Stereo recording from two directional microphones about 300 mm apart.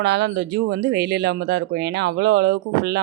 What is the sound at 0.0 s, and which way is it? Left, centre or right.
Speech, right.